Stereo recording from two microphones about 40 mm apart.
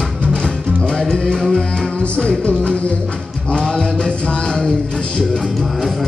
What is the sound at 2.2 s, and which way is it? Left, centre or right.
Music, left.